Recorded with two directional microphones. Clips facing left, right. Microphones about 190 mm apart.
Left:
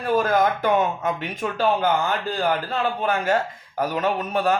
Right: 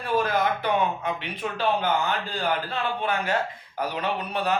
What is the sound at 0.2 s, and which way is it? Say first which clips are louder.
Speech: left 3 dB; 45° left (ahead or behind).